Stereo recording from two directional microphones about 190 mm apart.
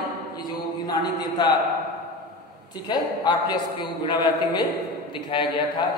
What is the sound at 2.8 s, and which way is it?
A man's voice, 20° left (ahead or behind).